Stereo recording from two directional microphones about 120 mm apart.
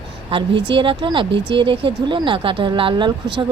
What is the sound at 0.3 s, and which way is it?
Speech, 45° right (ahead or behind).